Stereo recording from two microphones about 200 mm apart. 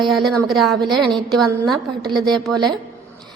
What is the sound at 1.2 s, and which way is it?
Speech, centre (ahead or behind).